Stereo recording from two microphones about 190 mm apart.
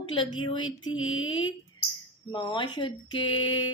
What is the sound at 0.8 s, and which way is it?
Mantra, 90° left.